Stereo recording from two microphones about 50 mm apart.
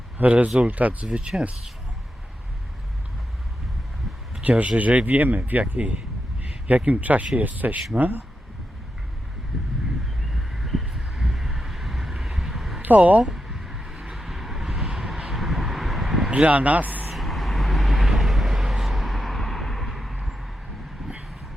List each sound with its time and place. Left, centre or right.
0.2 s speech: right
4.4 s speech: right
10.3 s vehicle: centre
12.8 s speech: right
13.2 s a sound: centre
16.3 s speech: right
17.1 s vehicle: centre